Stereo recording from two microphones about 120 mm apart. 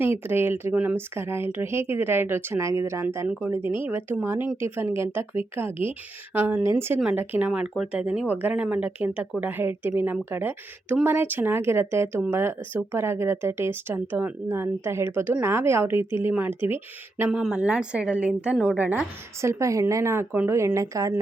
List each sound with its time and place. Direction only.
0.0 s speech: 20° right (ahead or behind)
19.4 s speech: 25° right (ahead or behind)